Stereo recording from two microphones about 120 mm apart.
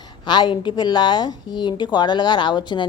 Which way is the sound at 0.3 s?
40° left (ahead or behind).